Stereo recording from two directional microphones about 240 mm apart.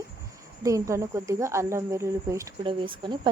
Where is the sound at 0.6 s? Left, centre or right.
Centre.